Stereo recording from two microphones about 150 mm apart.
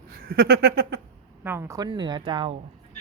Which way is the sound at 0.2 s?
90° right.